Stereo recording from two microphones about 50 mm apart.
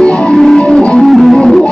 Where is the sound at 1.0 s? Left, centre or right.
Centre.